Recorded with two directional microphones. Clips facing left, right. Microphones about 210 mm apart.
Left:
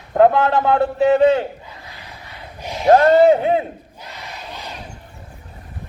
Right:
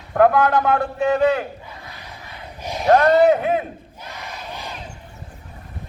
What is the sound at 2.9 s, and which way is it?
Speech, 25° left (ahead or behind).